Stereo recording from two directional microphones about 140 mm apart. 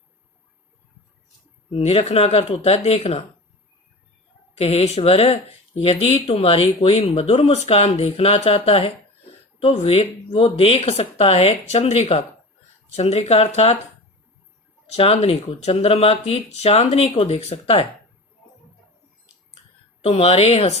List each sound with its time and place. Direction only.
1.7 s speech: 45° left (ahead or behind)
4.5 s speech: 50° left (ahead or behind)
14.9 s speech: 45° left (ahead or behind)
20.1 s speech: 50° left (ahead or behind)